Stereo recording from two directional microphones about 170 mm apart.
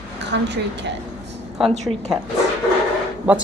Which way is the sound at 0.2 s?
90° right.